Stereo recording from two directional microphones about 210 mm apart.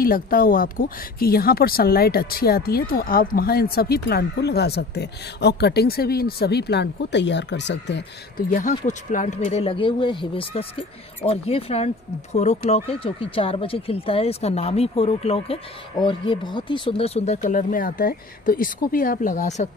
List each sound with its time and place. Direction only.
0.0 s speech: 45° left (ahead or behind)